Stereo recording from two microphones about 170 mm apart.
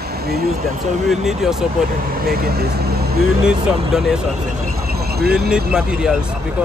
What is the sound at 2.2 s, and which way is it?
Speech, 65° right (ahead or behind).